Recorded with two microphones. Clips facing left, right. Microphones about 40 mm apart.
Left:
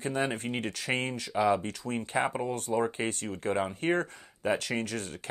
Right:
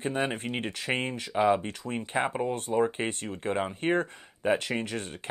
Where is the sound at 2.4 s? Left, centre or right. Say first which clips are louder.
Right 3 dB; right.